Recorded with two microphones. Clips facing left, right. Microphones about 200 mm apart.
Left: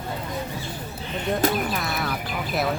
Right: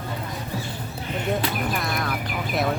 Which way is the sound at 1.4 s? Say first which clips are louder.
Left 6 dB; 45° left (ahead or behind).